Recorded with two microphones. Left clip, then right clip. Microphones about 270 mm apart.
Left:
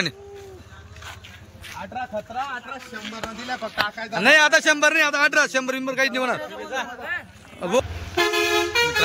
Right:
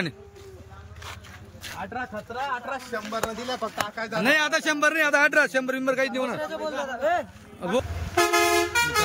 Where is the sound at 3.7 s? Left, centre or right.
Centre.